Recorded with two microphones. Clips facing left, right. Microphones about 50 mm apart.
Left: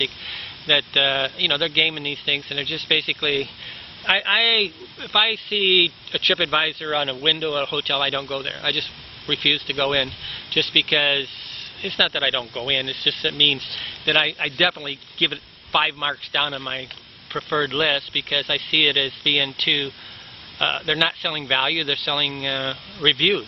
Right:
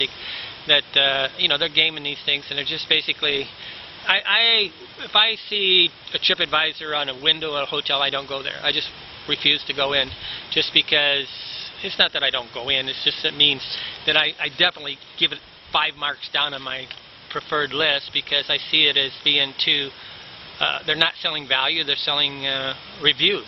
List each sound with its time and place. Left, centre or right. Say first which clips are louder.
0.0 s speech: even; centre
2.0 s speech: left 1 dB; centre